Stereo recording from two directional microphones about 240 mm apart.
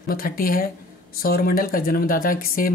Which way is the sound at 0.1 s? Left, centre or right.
Left.